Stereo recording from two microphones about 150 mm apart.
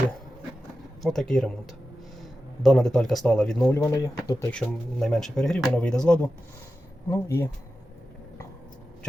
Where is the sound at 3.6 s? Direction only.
15° left (ahead or behind).